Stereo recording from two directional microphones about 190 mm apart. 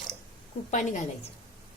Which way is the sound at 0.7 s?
40° left (ahead or behind).